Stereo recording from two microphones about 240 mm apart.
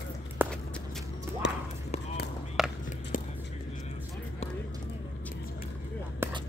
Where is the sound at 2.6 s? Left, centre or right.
Centre.